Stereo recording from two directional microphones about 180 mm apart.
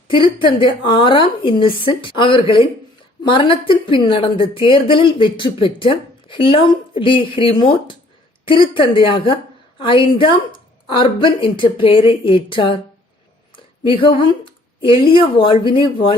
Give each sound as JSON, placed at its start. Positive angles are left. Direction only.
{"t": 0.1, "sound": "a woman's voice", "side_deg": 25}
{"t": 13.8, "sound": "a woman's voice", "side_deg": 30}